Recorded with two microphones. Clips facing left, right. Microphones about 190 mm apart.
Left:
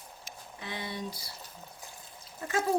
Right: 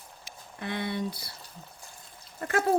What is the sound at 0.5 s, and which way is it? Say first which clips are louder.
Speech: right 7 dB; 60° right (ahead or behind).